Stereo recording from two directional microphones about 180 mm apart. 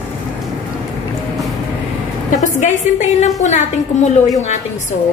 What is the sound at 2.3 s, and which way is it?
A woman's voice, 40° left (ahead or behind).